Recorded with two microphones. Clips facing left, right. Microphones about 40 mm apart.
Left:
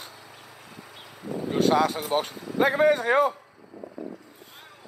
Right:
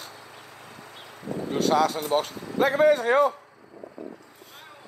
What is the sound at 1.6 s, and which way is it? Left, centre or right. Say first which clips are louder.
Speech: left 1 dB; left.